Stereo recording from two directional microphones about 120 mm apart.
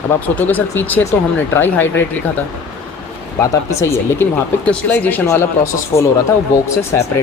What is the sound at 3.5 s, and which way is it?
Speech, 25° left (ahead or behind).